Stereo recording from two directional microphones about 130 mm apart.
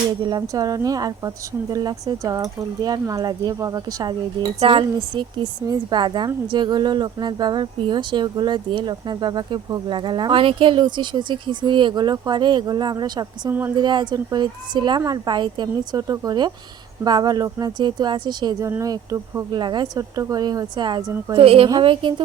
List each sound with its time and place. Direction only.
0.3 s speech: 30° right (ahead or behind)
13.5 s a woman's voice: 15° right (ahead or behind)
13.7 s speech: 35° right (ahead or behind)
21.3 s a woman's voice: 45° right (ahead or behind)